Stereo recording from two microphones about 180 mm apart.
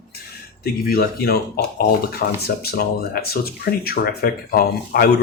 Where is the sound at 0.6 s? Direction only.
60° left (ahead or behind).